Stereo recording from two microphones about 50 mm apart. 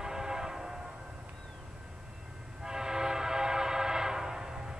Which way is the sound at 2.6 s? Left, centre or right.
Centre.